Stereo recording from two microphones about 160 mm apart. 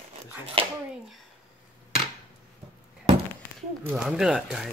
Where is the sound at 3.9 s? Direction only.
5° right (ahead or behind).